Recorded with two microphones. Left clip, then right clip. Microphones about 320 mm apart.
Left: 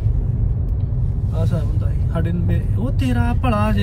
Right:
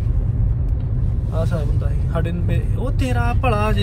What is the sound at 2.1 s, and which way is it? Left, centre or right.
Speech, centre.